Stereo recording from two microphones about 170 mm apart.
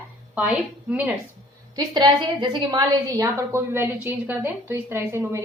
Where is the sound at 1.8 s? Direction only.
25° right (ahead or behind).